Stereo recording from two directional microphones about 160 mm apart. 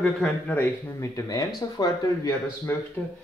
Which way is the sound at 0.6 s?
20° left (ahead or behind).